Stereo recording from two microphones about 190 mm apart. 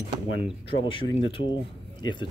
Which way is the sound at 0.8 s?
25° left (ahead or behind).